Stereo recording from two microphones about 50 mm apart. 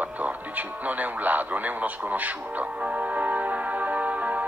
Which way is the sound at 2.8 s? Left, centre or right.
Right.